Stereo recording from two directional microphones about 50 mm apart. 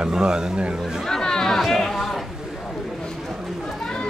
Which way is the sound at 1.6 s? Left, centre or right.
Centre.